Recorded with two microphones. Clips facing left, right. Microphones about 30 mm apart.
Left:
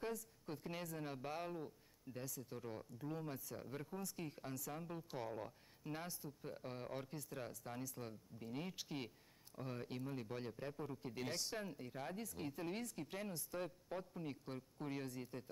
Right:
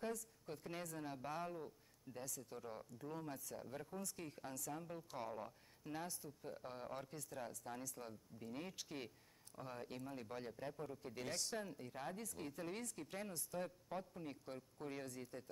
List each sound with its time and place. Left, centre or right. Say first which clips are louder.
0.0 s speech: even; centre
1.0 s speech: right 1 dB; left